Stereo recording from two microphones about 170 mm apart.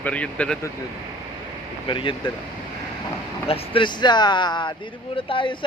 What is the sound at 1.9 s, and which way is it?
Speech, 30° left (ahead or behind).